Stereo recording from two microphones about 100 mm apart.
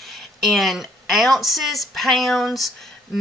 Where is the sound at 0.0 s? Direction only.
Centre (ahead or behind).